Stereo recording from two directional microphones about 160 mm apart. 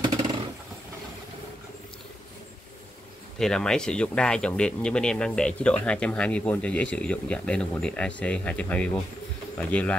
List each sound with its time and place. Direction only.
0.0 s vehicle: 40° right (ahead or behind)
3.3 s speech: 5° left (ahead or behind)